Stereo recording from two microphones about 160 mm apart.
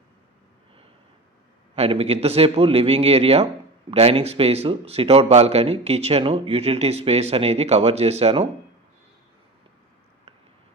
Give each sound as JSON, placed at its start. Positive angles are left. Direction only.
{"t": 1.7, "sound": "speech", "side_deg": -40}